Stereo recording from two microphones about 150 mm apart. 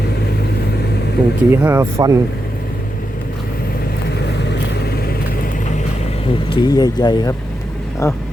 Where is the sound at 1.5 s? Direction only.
15° right (ahead or behind).